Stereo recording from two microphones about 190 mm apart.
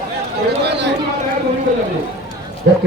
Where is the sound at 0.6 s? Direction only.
60° right (ahead or behind).